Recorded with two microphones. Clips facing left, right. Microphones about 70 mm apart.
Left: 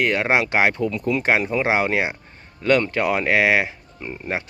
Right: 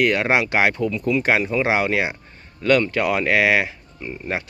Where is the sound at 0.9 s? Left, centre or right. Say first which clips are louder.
Right 1 dB; left.